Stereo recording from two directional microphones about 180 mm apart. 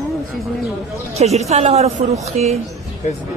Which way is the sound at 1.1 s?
35° right (ahead or behind).